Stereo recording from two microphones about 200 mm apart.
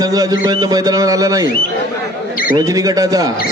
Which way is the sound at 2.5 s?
15° right (ahead or behind).